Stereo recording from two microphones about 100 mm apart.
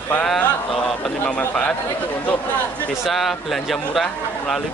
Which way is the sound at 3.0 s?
Centre (ahead or behind).